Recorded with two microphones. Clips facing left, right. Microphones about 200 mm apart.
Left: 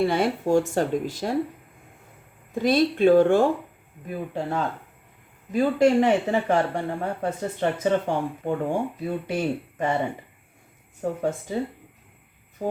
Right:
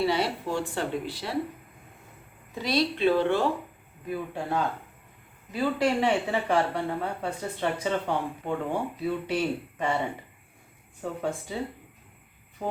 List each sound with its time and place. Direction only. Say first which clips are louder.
0.0 s speech: left 4 dB; 50° left (ahead or behind)
2.6 s speech: left 6 dB; 50° left (ahead or behind)
5.5 s speech: left 6 dB; 45° left (ahead or behind)
11.0 s speech: left 5 dB; 45° left (ahead or behind)